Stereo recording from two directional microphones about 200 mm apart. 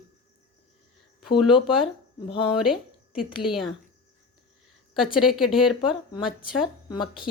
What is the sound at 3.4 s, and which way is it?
Speech, centre (ahead or behind).